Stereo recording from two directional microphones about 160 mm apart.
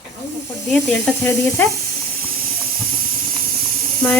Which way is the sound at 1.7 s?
70° right (ahead or behind).